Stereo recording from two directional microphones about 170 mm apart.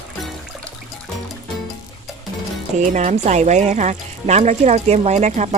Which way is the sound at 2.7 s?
45° right (ahead or behind).